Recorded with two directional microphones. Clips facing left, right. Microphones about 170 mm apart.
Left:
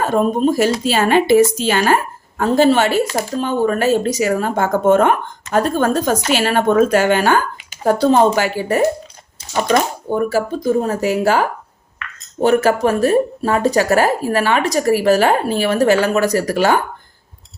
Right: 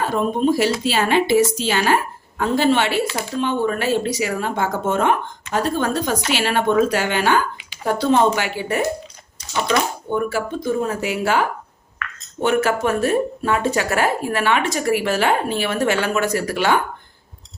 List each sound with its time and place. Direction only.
0.0 s speech: 45° left (ahead or behind)